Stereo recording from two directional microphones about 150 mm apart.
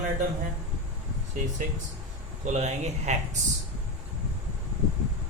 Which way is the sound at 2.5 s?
50° right (ahead or behind).